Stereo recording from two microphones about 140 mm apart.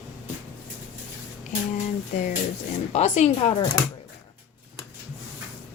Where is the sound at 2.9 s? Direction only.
55° left (ahead or behind).